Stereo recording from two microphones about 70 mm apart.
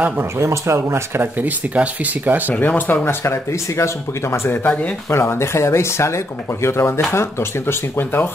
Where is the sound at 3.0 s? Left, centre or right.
Left.